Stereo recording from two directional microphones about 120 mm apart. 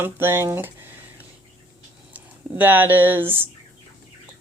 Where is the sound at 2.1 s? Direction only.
15° right (ahead or behind).